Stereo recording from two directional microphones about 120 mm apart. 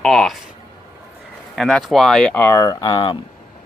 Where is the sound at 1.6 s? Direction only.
Centre (ahead or behind).